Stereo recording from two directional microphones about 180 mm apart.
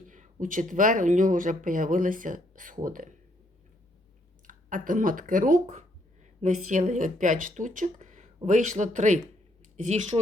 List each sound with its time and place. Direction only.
0.1 s speech: 45° right (ahead or behind)
4.4 s speech: 50° right (ahead or behind)